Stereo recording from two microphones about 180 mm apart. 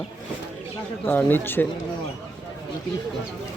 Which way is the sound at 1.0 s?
10° left (ahead or behind).